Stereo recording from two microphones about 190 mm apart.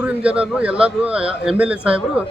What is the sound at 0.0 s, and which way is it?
A man's voice, 5° right (ahead or behind).